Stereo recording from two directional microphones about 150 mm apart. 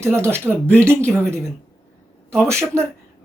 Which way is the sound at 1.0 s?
10° left (ahead or behind).